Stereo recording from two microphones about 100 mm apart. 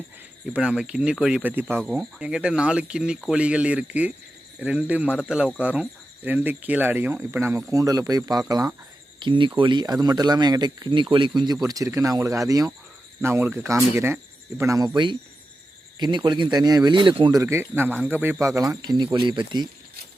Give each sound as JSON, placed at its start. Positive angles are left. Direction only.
{"t": 0.5, "sound": "speech", "side_deg": -10}
{"t": 1.9, "sound": "speech", "side_deg": -5}
{"t": 9.1, "sound": "speech", "side_deg": -55}
{"t": 13.2, "sound": "speech", "side_deg": -25}
{"t": 16.0, "sound": "speech", "side_deg": -50}
{"t": 17.4, "sound": "speech", "side_deg": -20}
{"t": 18.3, "sound": "speech", "side_deg": -35}